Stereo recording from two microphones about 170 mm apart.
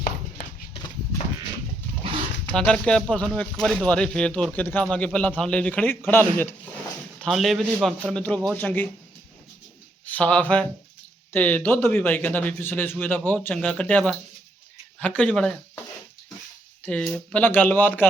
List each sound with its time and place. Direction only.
2.6 s speech: 5° left (ahead or behind)
7.2 s a man's voice: centre (ahead or behind)
10.1 s speech: 5° left (ahead or behind)
16.8 s speech: 5° left (ahead or behind)